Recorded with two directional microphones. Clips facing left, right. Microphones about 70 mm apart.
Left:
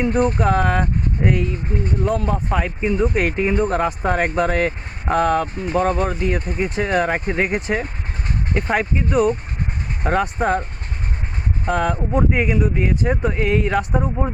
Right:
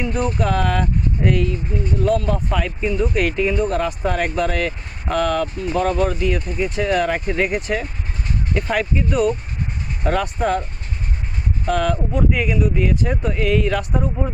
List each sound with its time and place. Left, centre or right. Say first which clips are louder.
0.0 s speech: left 3 dB; left
11.6 s speech: even; left